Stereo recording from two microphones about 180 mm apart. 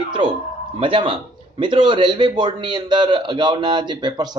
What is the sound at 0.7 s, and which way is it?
A man's voice, 30° right (ahead or behind).